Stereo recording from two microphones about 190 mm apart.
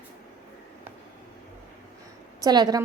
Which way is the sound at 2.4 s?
20° right (ahead or behind).